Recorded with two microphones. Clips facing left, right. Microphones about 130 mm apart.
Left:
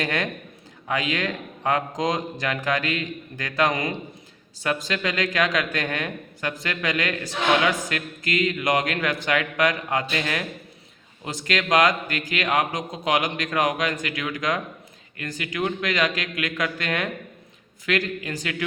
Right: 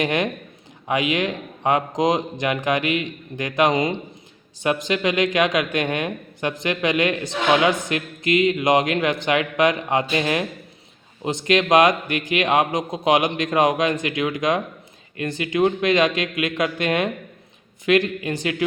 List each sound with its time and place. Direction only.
0.0 s speech: 20° right (ahead or behind)